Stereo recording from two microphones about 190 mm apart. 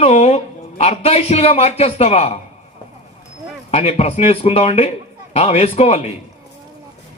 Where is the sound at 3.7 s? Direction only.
30° left (ahead or behind).